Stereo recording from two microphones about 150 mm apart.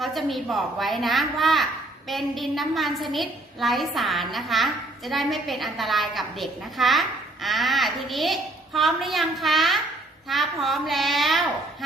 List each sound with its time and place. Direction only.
0.0 s a woman's voice: centre (ahead or behind)